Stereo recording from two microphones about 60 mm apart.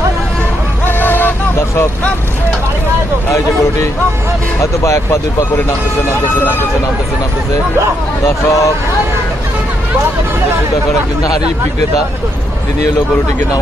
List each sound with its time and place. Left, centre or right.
0.8 s a sound: left
4.6 s speech: left
8.3 s speech: left